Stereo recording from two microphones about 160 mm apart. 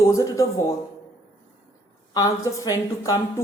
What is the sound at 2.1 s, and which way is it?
Speech, 20° left (ahead or behind).